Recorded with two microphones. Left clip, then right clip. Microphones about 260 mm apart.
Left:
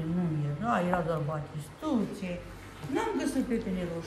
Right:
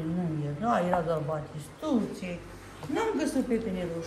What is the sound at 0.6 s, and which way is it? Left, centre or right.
Speech, centre.